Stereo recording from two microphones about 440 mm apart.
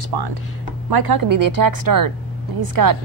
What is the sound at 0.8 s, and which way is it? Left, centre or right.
A woman's voice, right.